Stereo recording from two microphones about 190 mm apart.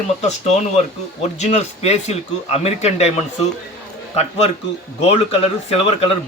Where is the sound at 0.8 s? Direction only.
35° left (ahead or behind).